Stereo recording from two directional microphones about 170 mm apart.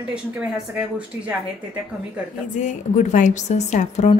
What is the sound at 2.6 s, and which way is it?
A woman's voice, 45° left (ahead or behind).